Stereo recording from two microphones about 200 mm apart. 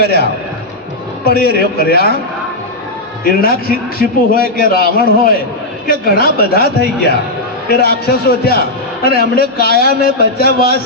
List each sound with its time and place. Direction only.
0.0 s a man's voice: 55° left (ahead or behind)
3.4 s a man's voice: 45° left (ahead or behind)